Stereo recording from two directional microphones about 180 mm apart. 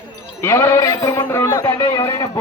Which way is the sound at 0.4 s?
15° left (ahead or behind).